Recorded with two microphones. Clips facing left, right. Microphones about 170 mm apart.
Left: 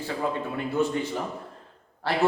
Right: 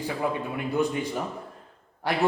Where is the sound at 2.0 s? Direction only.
15° right (ahead or behind).